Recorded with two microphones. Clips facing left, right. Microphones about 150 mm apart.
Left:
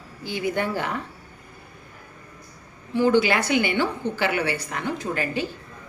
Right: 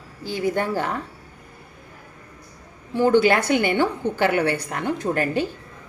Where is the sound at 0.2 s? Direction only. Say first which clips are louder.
Right 2 dB; 40° right (ahead or behind).